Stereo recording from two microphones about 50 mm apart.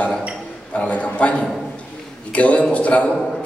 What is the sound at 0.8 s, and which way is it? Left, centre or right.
Speech, left.